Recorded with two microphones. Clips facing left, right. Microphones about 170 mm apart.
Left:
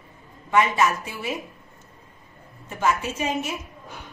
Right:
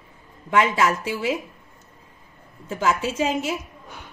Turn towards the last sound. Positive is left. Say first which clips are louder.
# right 3 dB
turn(degrees=-90)